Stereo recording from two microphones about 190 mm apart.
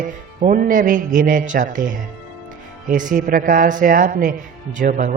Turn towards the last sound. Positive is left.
turn(degrees=-45)  # may be behind; listen again after turning